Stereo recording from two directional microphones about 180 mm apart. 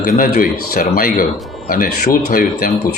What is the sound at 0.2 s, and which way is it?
Speech, 50° left (ahead or behind).